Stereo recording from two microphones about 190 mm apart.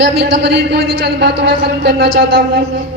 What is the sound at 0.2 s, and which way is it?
A man's voice, 60° right (ahead or behind).